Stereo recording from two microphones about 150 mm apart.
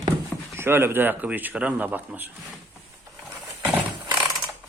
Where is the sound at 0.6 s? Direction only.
15° right (ahead or behind).